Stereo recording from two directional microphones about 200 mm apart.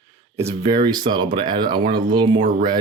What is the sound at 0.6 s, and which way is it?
Speech, 20° right (ahead or behind).